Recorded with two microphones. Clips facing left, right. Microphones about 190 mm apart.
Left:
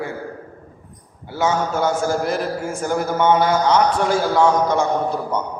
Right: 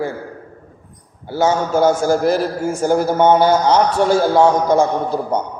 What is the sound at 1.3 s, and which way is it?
A man's voice, 40° right (ahead or behind).